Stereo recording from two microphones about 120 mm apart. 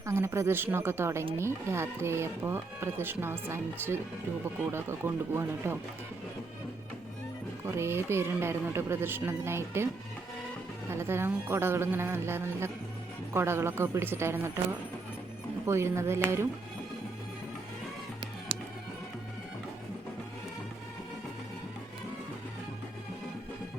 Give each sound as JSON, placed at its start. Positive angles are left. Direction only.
{"t": 0.0, "sound": "speech", "side_deg": -20}
{"t": 7.8, "sound": "speech", "side_deg": -20}